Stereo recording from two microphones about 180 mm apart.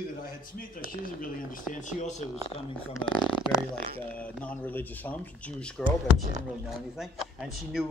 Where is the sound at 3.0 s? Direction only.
35° left (ahead or behind).